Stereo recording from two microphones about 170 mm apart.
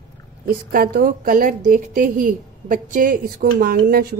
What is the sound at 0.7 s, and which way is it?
A woman's voice, 60° right (ahead or behind).